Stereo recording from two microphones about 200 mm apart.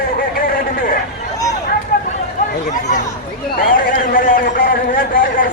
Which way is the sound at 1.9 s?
45° left (ahead or behind).